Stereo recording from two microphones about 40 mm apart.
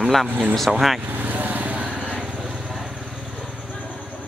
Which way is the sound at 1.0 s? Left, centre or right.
Right.